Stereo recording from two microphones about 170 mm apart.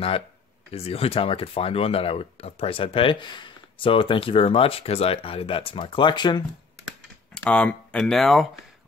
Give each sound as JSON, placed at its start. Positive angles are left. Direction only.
{"t": 0.7, "sound": "speech", "side_deg": 35}
{"t": 7.3, "sound": "speech", "side_deg": 5}